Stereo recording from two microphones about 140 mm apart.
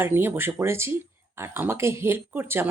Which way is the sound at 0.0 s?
15° right (ahead or behind).